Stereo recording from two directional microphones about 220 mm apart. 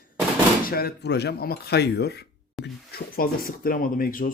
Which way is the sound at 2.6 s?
Centre (ahead or behind).